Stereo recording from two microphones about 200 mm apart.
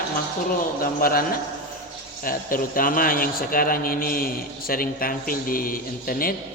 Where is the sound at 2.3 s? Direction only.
45° left (ahead or behind).